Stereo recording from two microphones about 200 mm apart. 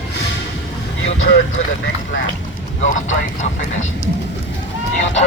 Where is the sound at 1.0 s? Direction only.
70° left (ahead or behind).